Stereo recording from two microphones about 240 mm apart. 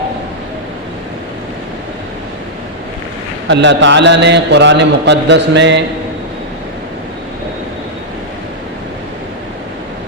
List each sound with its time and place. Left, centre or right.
3.5 s mantra: right